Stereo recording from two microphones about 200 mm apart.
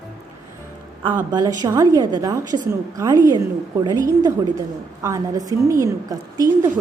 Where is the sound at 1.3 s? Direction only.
20° right (ahead or behind).